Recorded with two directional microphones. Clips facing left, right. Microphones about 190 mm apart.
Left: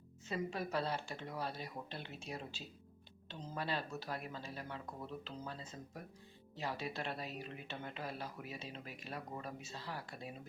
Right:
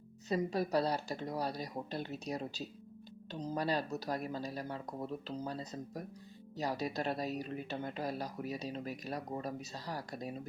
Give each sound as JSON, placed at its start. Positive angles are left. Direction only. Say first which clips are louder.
{"t": 0.3, "sound": "speech", "louder": "right 7 dB", "side_deg": -40}